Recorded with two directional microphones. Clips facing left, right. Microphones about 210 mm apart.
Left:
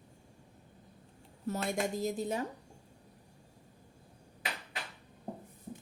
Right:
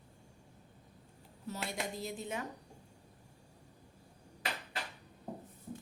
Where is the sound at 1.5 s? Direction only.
45° left (ahead or behind).